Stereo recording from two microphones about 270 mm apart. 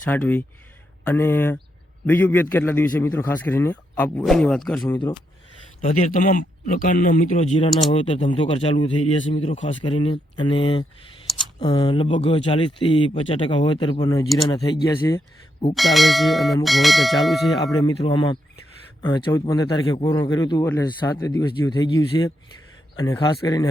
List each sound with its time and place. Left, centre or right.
0.0 s bell: centre
1.0 s a man's voice: centre
5.8 s a man's voice: left
15.7 s bell: centre
17.6 s a man's voice: centre